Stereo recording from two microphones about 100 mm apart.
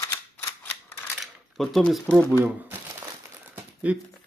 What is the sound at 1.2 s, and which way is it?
Cutlery, centre (ahead or behind).